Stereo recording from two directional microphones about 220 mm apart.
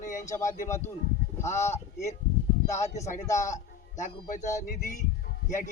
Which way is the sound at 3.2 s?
15° left (ahead or behind).